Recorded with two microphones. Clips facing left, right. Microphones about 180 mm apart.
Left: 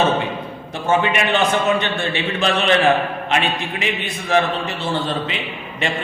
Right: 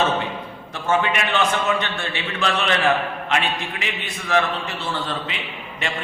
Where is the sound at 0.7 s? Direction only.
20° left (ahead or behind).